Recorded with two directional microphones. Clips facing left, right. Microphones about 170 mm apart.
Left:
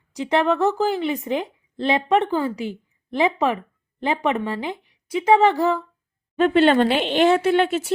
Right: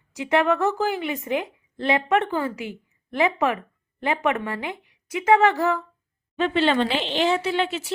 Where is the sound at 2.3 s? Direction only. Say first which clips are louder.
Left 3 dB; 15° left (ahead or behind).